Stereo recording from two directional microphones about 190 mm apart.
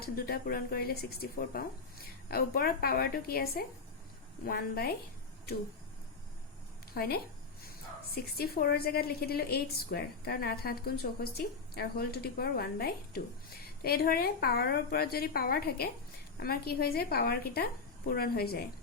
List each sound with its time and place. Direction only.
0.0 s a woman's voice: 55° left (ahead or behind)
6.9 s a woman's voice: 55° left (ahead or behind)